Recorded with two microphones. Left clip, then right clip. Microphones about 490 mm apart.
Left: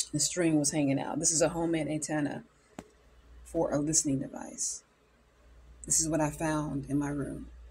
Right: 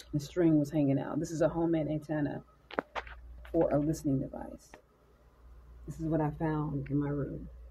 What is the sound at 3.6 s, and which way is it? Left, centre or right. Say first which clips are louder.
Speech: left 1 dB; right.